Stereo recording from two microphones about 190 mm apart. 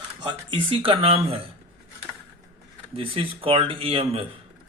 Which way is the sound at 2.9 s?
30° right (ahead or behind).